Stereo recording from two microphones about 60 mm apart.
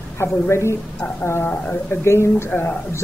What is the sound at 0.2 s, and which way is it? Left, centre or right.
A woman's voice, left.